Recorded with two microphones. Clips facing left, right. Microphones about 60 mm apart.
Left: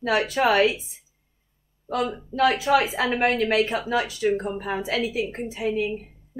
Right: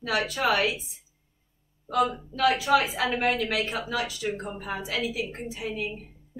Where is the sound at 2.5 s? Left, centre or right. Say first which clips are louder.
Left 2 dB; centre.